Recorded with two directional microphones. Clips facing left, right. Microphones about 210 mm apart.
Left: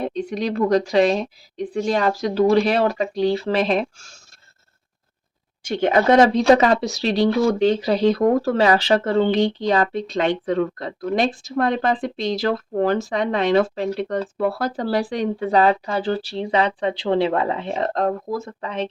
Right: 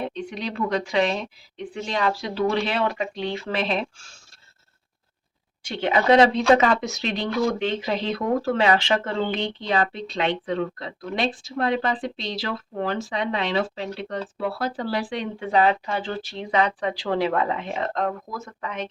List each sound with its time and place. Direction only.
0.0 s speech: 40° left (ahead or behind)
5.6 s speech: 45° left (ahead or behind); by 18.9 s 30° left (ahead or behind)